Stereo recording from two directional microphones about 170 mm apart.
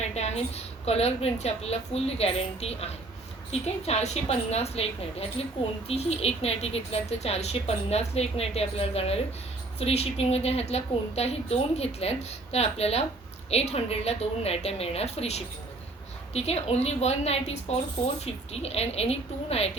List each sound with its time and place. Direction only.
0.1 s speech: 40° left (ahead or behind)